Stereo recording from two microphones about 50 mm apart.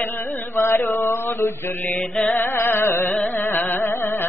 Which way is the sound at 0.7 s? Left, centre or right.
Left.